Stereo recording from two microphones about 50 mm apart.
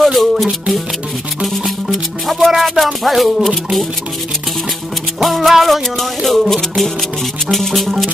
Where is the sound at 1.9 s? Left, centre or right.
Centre.